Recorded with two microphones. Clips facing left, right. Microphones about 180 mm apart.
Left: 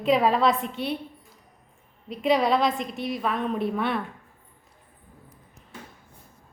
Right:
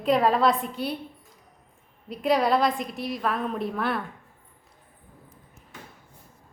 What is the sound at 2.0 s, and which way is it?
A woman's voice, centre (ahead or behind).